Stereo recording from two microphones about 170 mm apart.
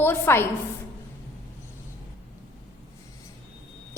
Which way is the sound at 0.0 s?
15° left (ahead or behind).